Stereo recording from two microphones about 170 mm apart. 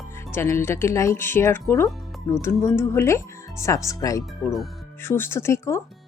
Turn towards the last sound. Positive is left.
turn(degrees=15)  # may be behind; listen again after turning